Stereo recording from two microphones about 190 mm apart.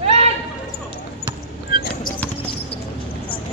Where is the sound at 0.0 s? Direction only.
35° right (ahead or behind).